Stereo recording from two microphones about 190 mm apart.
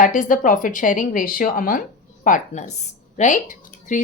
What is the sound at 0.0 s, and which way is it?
A woman's voice, 45° left (ahead or behind).